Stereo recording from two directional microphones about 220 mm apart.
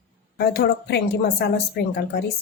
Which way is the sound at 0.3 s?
45° left (ahead or behind).